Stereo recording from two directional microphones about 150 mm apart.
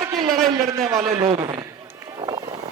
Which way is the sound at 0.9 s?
20° right (ahead or behind).